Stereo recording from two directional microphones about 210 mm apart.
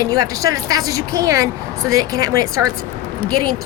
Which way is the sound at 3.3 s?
90° right.